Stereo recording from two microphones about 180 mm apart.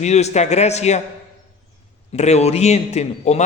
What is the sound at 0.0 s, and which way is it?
A man's voice, 40° left (ahead or behind).